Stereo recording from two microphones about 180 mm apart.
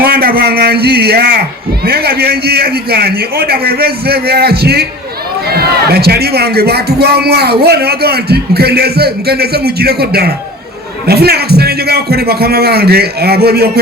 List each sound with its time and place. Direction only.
0.0 s a man's voice: 55° right (ahead or behind)